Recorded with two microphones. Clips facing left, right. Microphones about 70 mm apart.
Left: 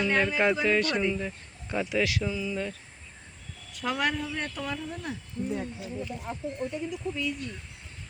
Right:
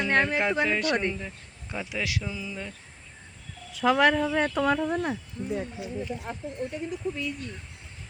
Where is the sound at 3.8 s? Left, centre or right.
Right.